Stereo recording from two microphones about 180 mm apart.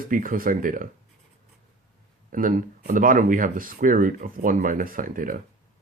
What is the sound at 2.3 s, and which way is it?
Speech, 45° right (ahead or behind).